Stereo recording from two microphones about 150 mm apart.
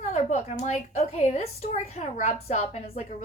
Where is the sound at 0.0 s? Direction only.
55° left (ahead or behind).